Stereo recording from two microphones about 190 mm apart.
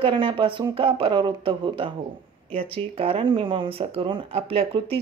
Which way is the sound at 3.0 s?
30° right (ahead or behind).